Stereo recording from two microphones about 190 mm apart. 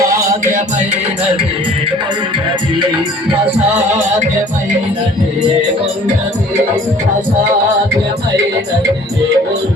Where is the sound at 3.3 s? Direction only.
30° right (ahead or behind).